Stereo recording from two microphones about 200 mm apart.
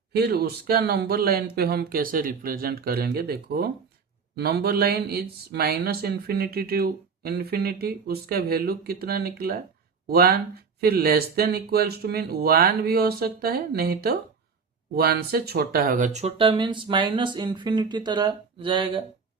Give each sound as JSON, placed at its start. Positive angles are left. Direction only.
{"t": 0.2, "sound": "speech", "side_deg": -50}
{"t": 16.4, "sound": "speech", "side_deg": -25}